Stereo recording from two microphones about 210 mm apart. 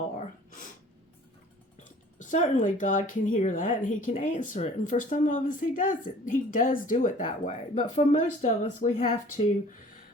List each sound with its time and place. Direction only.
1.8 s speech: 35° left (ahead or behind)